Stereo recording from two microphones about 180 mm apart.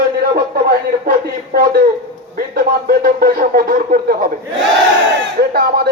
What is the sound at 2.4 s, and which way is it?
Speech, 50° right (ahead or behind).